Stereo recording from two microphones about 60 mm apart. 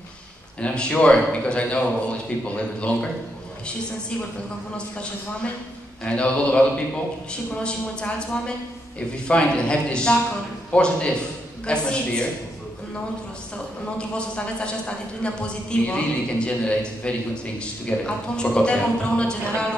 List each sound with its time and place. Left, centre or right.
0.6 s a man's voice: centre
4.7 s a man's voice: centre
13.9 s a woman's voice: centre